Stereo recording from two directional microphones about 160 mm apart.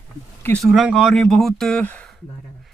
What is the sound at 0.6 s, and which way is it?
Speech, centre (ahead or behind).